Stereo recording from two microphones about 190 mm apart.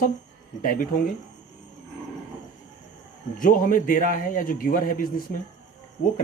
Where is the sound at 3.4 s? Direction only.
45° left (ahead or behind).